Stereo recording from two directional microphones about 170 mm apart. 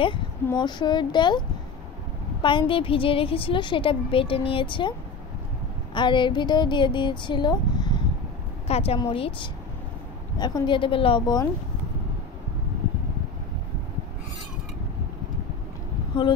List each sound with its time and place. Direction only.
0.6 s speech: 25° left (ahead or behind)
2.4 s a woman's voice: 30° left (ahead or behind)
5.9 s speech: 30° left (ahead or behind)
8.6 s a woman's voice: 35° left (ahead or behind)